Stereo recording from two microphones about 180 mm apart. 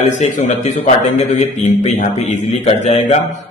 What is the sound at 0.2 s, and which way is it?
A man's voice, 40° left (ahead or behind).